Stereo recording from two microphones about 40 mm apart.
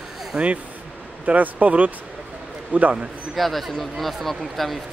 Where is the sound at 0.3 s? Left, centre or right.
Right.